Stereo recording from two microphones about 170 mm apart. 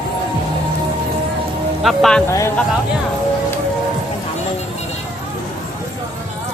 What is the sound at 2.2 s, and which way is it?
Speech, 15° left (ahead or behind).